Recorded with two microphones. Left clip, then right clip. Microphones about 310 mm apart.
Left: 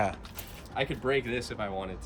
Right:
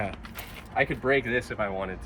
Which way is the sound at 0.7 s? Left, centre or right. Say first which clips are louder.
Right 5 dB; centre.